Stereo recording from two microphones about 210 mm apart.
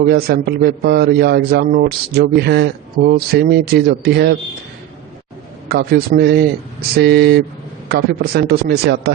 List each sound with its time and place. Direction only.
0.0 s a man's voice: 50° right (ahead or behind)
5.6 s a man's voice: 50° right (ahead or behind)